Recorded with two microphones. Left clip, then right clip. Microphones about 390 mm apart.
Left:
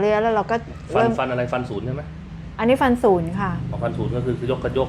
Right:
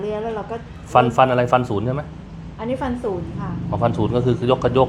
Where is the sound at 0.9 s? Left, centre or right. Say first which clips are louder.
Right 5 dB; right.